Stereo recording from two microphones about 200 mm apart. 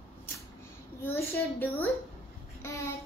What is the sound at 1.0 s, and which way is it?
A child's voice, 10° left (ahead or behind).